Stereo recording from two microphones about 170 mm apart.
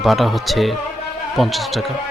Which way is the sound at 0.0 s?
Centre (ahead or behind).